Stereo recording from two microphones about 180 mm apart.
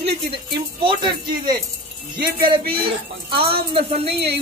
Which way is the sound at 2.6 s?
55° right (ahead or behind).